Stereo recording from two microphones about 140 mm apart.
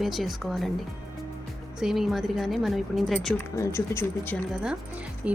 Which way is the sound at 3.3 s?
20° left (ahead or behind).